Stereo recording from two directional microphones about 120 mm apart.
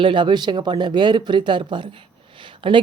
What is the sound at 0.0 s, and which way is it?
Speech, 45° right (ahead or behind).